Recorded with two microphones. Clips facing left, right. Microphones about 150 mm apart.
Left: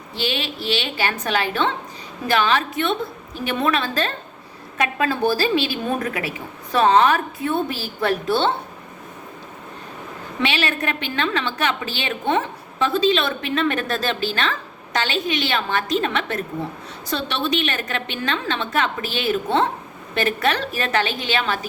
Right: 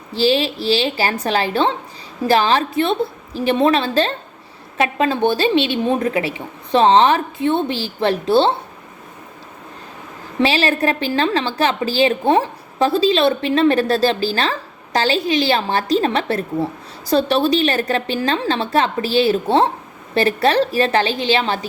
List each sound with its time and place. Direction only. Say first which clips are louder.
0.1 s a woman's voice: right 9 dB; 30° right (ahead or behind)
10.4 s a woman's voice: right 6 dB; 35° right (ahead or behind)